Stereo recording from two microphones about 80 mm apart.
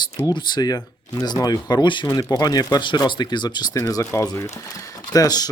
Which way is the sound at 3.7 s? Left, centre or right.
Left.